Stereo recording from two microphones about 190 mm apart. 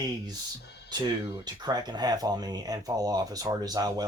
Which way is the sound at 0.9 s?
20° right (ahead or behind).